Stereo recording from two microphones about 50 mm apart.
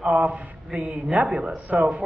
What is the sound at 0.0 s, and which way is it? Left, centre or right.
A man's voice, right.